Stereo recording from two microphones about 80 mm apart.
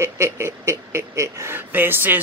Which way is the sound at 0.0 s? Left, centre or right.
Right.